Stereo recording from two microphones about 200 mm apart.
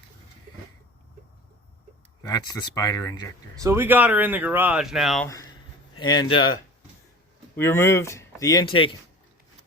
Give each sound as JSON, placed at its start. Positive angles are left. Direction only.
{"t": 2.2, "sound": "speech", "side_deg": 20}
{"t": 3.6, "sound": "speech", "side_deg": -10}
{"t": 5.2, "sound": "speech", "side_deg": 15}
{"t": 7.5, "sound": "speech", "side_deg": 10}